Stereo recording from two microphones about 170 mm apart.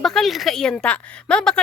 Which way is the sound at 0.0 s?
Centre (ahead or behind).